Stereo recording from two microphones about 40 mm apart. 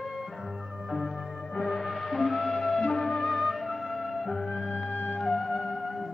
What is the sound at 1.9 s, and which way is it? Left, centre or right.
Music, centre.